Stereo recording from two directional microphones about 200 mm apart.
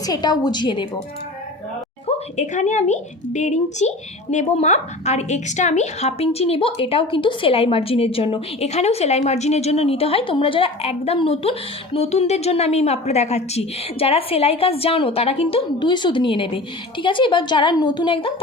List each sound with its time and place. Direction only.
0.0 s a woman's voice: 20° left (ahead or behind)
2.0 s a woman's voice: 35° left (ahead or behind)